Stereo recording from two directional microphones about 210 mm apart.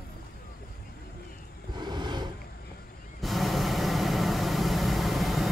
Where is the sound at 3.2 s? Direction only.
Centre (ahead or behind).